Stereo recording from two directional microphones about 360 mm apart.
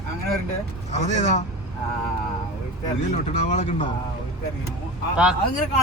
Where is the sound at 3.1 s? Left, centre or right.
Centre.